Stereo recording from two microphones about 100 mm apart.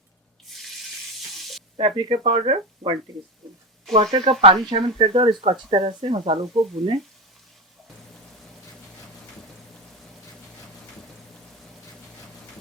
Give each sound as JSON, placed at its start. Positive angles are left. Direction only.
{"t": 1.7, "sound": "speech", "side_deg": -70}
{"t": 3.9, "sound": "speech", "side_deg": -75}